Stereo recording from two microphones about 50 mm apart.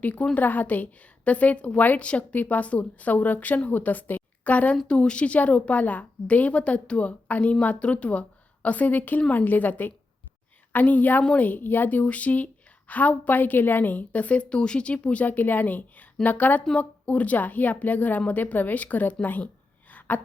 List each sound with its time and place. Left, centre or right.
0.0 s a woman's voice: left
15.2 s a woman's voice: left
19.9 s a sound: left